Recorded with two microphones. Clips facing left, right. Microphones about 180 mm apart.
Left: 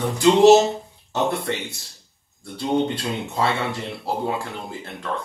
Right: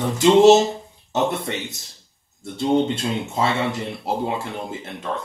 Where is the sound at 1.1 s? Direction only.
20° right (ahead or behind).